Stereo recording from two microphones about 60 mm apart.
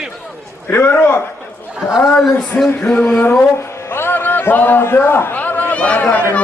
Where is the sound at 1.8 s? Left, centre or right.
Left.